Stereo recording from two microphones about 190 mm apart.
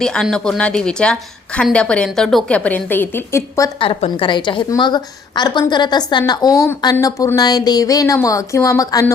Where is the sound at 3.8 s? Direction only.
30° left (ahead or behind).